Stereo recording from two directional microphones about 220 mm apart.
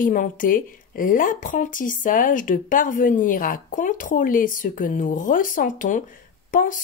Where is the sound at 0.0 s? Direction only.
40° left (ahead or behind).